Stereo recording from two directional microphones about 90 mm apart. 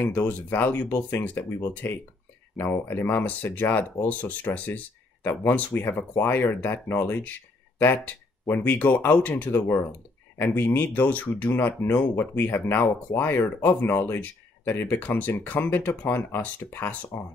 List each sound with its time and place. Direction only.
0.0 s speech: 20° left (ahead or behind)